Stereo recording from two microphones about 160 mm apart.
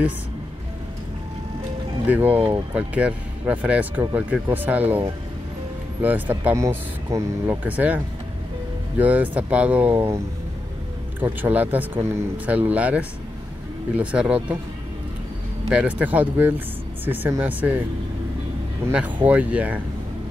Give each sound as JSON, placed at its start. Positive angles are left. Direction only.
{"t": 2.0, "sound": "speech", "side_deg": -10}
{"t": 6.0, "sound": "speech", "side_deg": -10}
{"t": 11.1, "sound": "speech", "side_deg": -10}
{"t": 15.7, "sound": "speech", "side_deg": -10}
{"t": 18.9, "sound": "speech", "side_deg": -10}